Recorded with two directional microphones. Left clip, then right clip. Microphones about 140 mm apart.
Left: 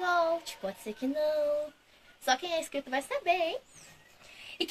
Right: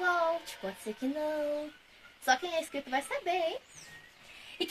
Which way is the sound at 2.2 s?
25° left (ahead or behind).